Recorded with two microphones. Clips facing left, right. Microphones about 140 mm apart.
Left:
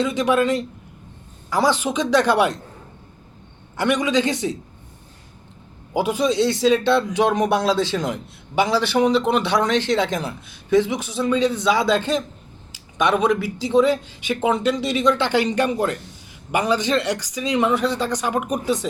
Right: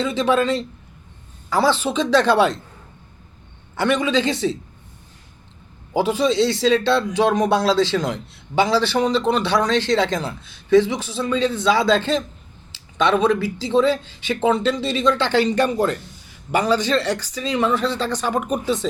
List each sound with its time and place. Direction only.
0.0 s a man's voice: 15° left (ahead or behind)
3.8 s a man's voice: 15° left (ahead or behind)
5.9 s a man's voice: 15° left (ahead or behind)